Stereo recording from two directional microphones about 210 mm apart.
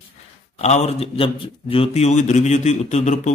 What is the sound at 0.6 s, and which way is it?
Speech, 30° left (ahead or behind).